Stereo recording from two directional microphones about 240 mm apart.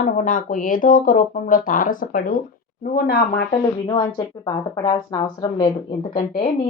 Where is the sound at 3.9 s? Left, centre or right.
Centre.